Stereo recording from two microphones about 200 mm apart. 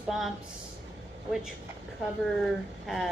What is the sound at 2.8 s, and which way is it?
Speech, centre (ahead or behind).